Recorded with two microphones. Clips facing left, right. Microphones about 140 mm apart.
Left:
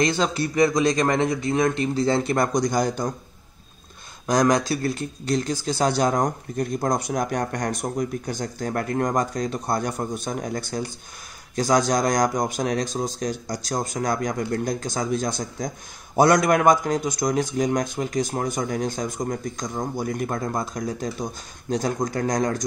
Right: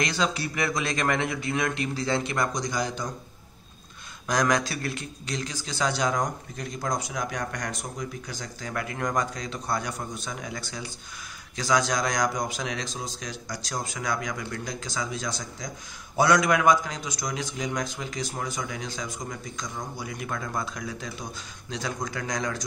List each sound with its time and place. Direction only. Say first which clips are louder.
0.2 s a man's voice: left 7 dB; 45° left (ahead or behind)
4.3 s a man's voice: left 5 dB; 40° left (ahead or behind)